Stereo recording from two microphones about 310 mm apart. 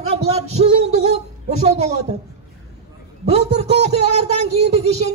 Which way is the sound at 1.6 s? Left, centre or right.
Right.